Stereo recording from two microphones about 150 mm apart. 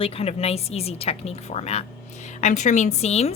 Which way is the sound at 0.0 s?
40° left (ahead or behind).